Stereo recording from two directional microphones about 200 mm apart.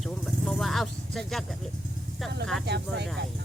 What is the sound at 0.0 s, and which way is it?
Vehicle, centre (ahead or behind).